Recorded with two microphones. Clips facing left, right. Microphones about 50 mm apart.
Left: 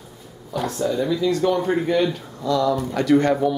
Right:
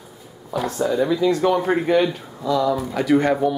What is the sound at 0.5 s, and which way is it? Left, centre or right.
Speech, centre.